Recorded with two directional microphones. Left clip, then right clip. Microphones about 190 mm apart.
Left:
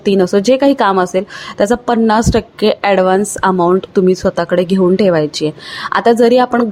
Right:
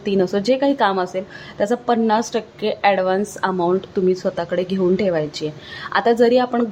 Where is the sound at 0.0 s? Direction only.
25° left (ahead or behind).